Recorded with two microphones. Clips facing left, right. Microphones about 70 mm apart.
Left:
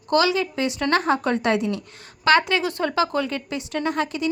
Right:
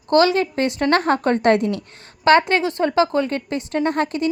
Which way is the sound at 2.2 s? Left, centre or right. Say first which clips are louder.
Right 4 dB; right.